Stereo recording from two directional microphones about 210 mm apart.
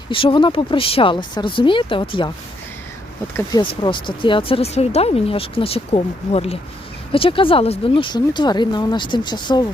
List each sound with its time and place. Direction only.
0.1 s speech: 25° left (ahead or behind)
3.3 s speech: 20° left (ahead or behind)